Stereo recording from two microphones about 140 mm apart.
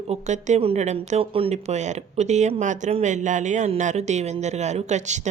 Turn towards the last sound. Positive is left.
turn(degrees=-55)  # may be behind; listen again after turning